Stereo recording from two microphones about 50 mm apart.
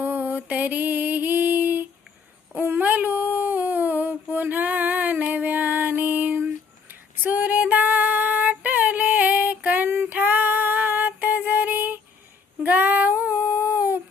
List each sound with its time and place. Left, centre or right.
0.0 s mantra: right
2.6 s a sound: right
7.2 s female singing: right
9.8 s female singing: right
10.1 s female singing: right